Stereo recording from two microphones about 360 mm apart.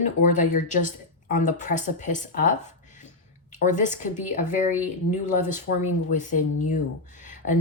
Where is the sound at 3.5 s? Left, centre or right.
Left.